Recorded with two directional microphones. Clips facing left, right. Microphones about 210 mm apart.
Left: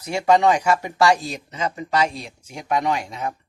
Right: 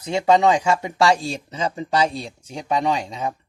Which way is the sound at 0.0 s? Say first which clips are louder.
Right 1 dB; 20° right (ahead or behind).